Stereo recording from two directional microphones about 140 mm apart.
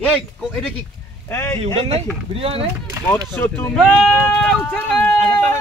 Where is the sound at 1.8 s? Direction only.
45° right (ahead or behind).